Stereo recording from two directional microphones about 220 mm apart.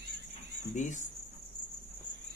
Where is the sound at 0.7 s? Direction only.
35° left (ahead or behind).